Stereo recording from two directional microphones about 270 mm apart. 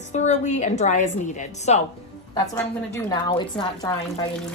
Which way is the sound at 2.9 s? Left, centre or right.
Centre.